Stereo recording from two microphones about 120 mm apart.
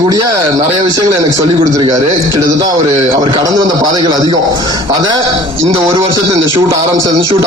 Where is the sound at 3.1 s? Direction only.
35° right (ahead or behind).